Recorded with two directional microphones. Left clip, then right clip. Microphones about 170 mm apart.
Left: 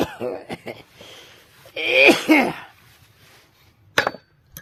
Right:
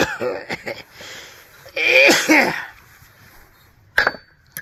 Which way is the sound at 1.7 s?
50° left (ahead or behind).